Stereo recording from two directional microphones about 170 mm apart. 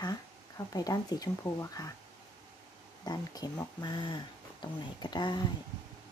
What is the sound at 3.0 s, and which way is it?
Speech, 20° left (ahead or behind).